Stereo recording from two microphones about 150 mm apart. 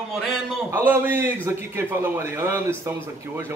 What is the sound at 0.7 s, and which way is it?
A man's voice, 15° right (ahead or behind).